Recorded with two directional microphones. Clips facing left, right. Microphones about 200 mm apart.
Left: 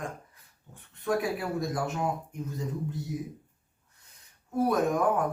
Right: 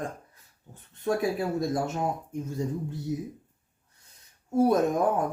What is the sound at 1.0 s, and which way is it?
Speech, 30° right (ahead or behind).